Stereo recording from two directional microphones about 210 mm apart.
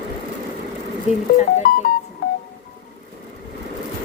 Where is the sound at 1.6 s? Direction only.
45° left (ahead or behind).